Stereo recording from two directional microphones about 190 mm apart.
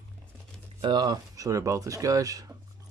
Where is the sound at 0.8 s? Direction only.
20° right (ahead or behind).